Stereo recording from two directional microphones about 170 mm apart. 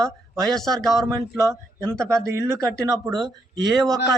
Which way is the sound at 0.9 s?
20° right (ahead or behind).